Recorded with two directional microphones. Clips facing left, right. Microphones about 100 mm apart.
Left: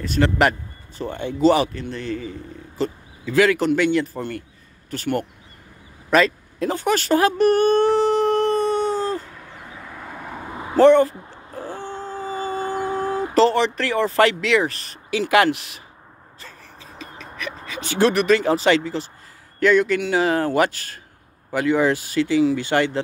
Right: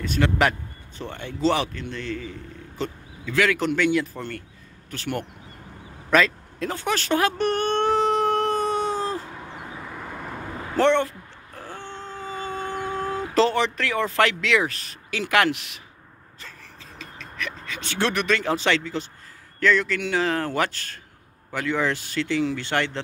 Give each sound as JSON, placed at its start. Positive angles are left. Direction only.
{"t": 0.0, "sound": "speech", "side_deg": 0}
{"t": 1.1, "sound": "speech", "side_deg": 10}
{"t": 6.1, "sound": "a sound", "side_deg": 10}
{"t": 9.8, "sound": "vehicle", "side_deg": 0}
{"t": 11.5, "sound": "a sound", "side_deg": 20}
{"t": 13.3, "sound": "speech", "side_deg": 0}
{"t": 17.0, "sound": "speech", "side_deg": 5}
{"t": 19.6, "sound": "speech", "side_deg": 15}